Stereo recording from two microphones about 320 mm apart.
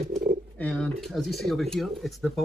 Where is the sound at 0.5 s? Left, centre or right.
Centre.